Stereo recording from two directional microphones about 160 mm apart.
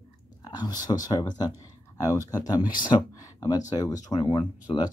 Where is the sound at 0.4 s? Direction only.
25° left (ahead or behind).